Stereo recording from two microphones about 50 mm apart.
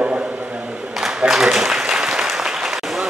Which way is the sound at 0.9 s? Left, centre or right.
Centre.